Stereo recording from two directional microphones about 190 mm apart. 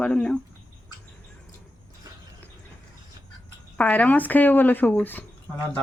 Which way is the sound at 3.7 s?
10° left (ahead or behind).